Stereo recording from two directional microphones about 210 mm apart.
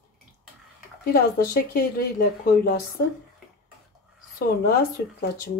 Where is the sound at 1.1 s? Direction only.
45° left (ahead or behind).